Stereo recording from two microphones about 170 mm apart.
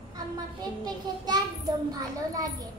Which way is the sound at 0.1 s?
25° right (ahead or behind).